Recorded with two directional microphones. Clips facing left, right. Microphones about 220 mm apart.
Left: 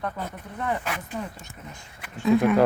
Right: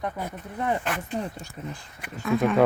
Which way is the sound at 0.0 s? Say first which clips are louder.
Right 1 dB; 20° right (ahead or behind).